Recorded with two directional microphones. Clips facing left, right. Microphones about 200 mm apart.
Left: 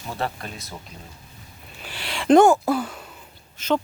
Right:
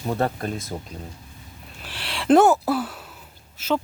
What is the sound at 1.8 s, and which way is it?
Speech, centre (ahead or behind).